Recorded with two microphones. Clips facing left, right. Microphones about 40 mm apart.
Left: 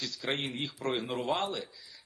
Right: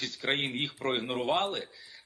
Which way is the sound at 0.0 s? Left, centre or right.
Right.